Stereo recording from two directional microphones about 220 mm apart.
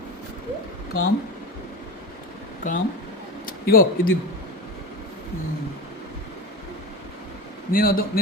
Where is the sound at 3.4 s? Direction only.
40° left (ahead or behind).